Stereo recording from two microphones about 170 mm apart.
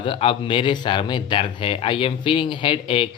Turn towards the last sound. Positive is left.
turn(degrees=30)  # may be behind; listen again after turning